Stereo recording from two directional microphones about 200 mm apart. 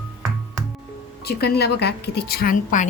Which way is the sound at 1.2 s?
55° left (ahead or behind).